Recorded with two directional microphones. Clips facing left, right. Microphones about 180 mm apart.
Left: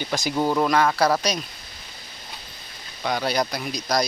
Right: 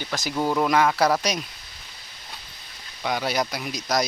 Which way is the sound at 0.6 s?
10° right (ahead or behind).